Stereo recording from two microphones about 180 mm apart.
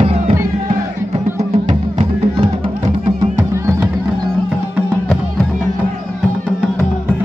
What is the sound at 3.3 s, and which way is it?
Music, 10° right (ahead or behind).